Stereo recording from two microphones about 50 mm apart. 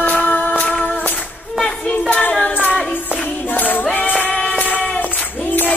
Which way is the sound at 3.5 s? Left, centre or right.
Left.